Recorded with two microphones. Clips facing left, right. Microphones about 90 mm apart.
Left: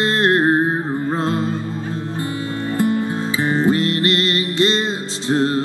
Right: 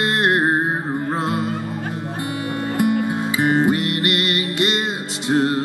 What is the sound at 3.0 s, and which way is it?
Music, 15° right (ahead or behind).